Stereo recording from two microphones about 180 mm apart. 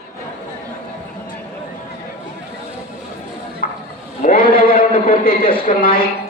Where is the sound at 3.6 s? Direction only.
45° left (ahead or behind).